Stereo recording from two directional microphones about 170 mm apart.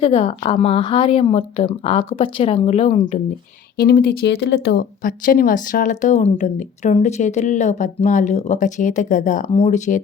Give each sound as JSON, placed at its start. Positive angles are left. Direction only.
{"t": 0.0, "sound": "speech", "side_deg": 35}
{"t": 3.8, "sound": "speech", "side_deg": 65}